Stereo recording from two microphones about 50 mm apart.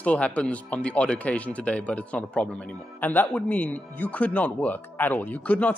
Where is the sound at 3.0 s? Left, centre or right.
Left.